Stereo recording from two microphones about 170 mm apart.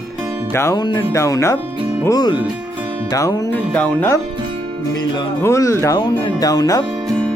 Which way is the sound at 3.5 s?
10° left (ahead or behind).